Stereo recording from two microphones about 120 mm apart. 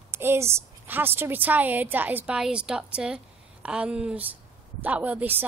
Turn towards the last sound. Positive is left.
turn(degrees=-15)  # may be behind; listen again after turning